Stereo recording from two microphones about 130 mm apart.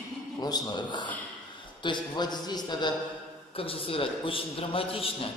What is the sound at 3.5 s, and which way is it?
A man's voice, 45° left (ahead or behind).